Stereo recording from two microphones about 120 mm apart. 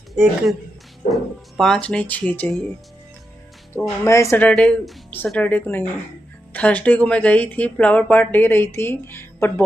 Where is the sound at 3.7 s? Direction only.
25° left (ahead or behind).